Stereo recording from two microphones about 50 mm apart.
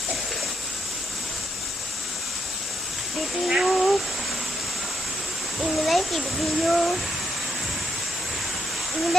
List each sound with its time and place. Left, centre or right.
3.3 s speech: centre
5.5 s a child's voice: centre